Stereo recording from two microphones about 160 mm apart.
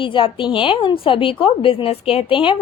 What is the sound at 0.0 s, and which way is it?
A woman's voice, 30° left (ahead or behind).